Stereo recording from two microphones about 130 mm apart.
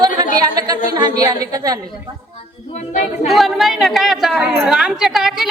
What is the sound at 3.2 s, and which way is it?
A woman's voice, centre (ahead or behind).